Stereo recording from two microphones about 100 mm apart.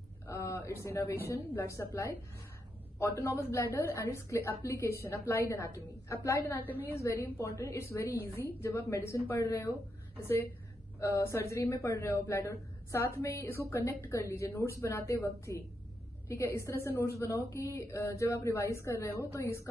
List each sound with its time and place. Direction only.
0.3 s a sound: 20° left (ahead or behind)
0.8 s a woman's voice: 25° left (ahead or behind)
6.6 s a woman's voice: 20° left (ahead or behind)
11.0 s a woman's voice: 30° left (ahead or behind)